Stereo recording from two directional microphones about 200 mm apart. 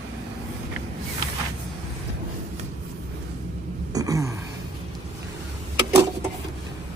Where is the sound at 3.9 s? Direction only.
15° right (ahead or behind).